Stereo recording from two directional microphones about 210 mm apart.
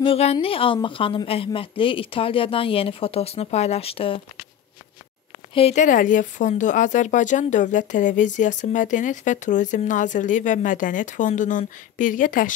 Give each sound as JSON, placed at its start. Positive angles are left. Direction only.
{"t": 0.0, "sound": "a woman's voice", "side_deg": 30}
{"t": 5.5, "sound": "speech", "side_deg": 30}